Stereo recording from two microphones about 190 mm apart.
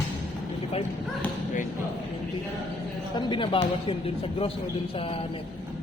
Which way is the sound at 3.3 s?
25° left (ahead or behind).